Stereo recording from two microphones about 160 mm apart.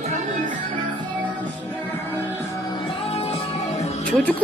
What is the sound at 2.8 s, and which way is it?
Music, 40° left (ahead or behind).